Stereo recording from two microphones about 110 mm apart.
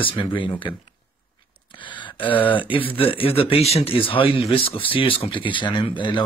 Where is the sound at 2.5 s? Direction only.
55° left (ahead or behind).